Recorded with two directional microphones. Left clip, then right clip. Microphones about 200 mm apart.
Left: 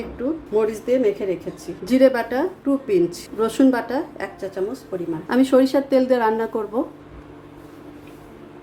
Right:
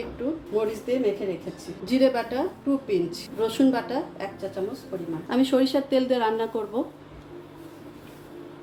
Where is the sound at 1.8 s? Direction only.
30° left (ahead or behind).